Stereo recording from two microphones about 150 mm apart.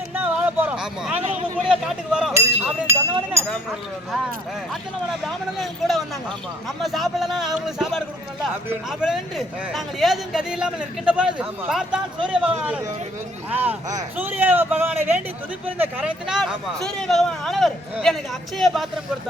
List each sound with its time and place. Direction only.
0.1 s a sound: 10° right (ahead or behind)
1.6 s speech: 5° right (ahead or behind)
2.3 s speech: 15° right (ahead or behind)
5.2 s speech: centre (ahead or behind)